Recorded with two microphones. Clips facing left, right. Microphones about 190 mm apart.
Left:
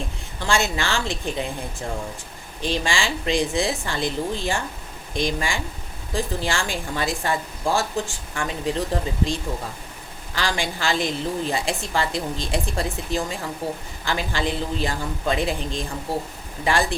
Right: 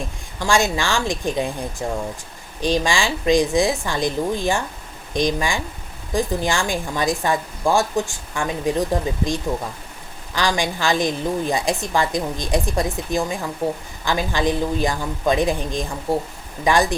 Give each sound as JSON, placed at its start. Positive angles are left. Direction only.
{"t": 0.4, "sound": "a woman's voice", "side_deg": -15}
{"t": 2.6, "sound": "a woman's voice", "side_deg": -15}